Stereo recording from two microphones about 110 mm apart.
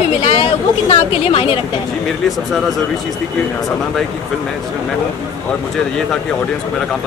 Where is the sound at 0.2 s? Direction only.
60° left (ahead or behind).